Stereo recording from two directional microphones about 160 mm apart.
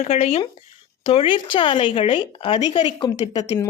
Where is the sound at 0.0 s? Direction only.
40° left (ahead or behind).